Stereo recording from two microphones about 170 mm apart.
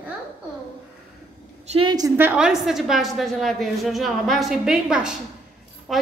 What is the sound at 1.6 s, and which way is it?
Speech, 35° right (ahead or behind).